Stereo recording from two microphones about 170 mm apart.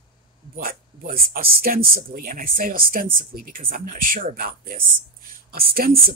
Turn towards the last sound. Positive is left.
turn(degrees=-60)  # may be behind; listen again after turning